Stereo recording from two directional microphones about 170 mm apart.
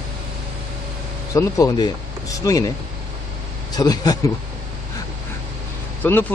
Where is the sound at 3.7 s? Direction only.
20° left (ahead or behind).